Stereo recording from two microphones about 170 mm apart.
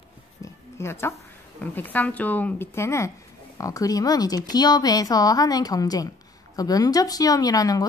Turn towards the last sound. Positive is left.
turn(degrees=20)  # may be behind; listen again after turning